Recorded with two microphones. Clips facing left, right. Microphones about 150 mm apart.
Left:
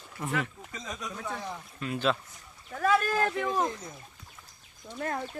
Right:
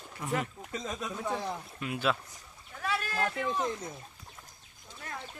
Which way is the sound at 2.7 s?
45° left (ahead or behind).